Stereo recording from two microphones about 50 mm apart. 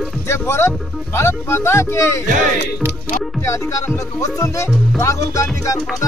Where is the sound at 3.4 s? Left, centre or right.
Left.